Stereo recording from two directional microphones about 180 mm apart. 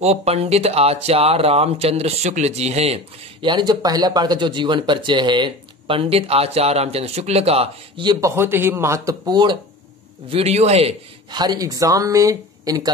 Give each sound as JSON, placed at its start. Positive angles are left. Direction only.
{"t": 0.0, "sound": "speech", "side_deg": -35}
{"t": 3.4, "sound": "speech", "side_deg": -25}
{"t": 8.4, "sound": "speech", "side_deg": -10}
{"t": 10.3, "sound": "speech", "side_deg": -35}
{"t": 11.4, "sound": "speech", "side_deg": -20}